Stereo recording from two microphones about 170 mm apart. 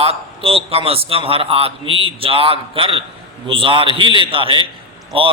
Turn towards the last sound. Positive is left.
turn(degrees=-30)  # may be behind; listen again after turning